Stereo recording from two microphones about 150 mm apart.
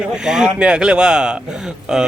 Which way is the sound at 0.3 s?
5° right (ahead or behind).